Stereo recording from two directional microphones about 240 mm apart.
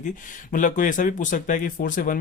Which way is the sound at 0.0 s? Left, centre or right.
Left.